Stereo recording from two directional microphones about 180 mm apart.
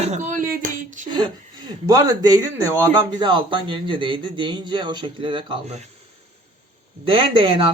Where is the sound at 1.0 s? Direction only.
25° right (ahead or behind).